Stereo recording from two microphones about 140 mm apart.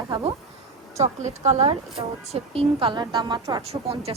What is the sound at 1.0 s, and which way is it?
A woman's voice, 55° right (ahead or behind).